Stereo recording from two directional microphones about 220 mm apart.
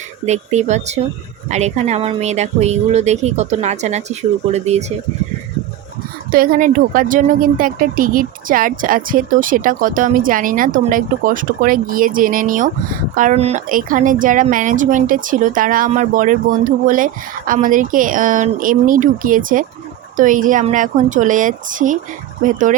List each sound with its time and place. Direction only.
0.3 s speech: 30° right (ahead or behind)
6.3 s speech: 40° right (ahead or behind)